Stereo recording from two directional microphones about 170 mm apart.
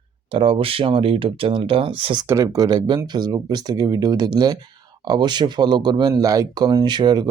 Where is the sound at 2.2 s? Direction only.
15° right (ahead or behind).